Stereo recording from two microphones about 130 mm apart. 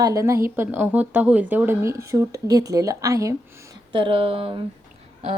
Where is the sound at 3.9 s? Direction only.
40° right (ahead or behind).